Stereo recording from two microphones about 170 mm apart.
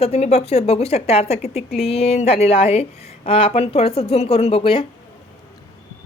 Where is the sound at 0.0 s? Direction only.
40° left (ahead or behind).